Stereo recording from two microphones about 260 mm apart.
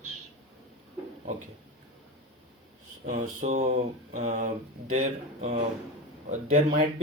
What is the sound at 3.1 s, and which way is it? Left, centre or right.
Speech, right.